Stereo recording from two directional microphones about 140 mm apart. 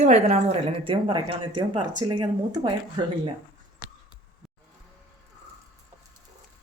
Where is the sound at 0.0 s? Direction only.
55° right (ahead or behind); by 3.0 s 30° right (ahead or behind).